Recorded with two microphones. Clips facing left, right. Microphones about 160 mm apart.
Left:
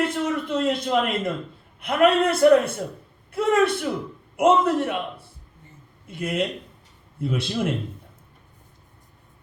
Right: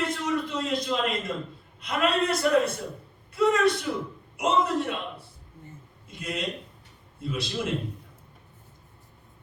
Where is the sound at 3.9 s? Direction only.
50° left (ahead or behind).